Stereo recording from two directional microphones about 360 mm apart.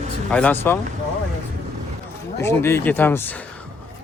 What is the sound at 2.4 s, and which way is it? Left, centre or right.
Speech, centre.